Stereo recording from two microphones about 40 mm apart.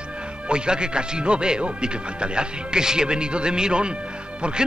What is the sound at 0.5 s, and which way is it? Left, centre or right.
Speech, right.